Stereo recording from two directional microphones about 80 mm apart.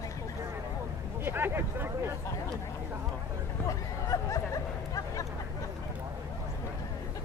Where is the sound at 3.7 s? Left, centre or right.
Left.